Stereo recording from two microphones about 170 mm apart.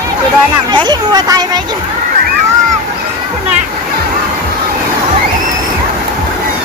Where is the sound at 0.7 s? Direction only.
25° right (ahead or behind).